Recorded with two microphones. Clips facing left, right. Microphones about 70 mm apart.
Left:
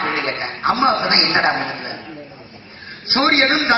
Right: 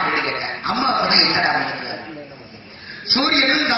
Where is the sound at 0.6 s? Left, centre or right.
Left.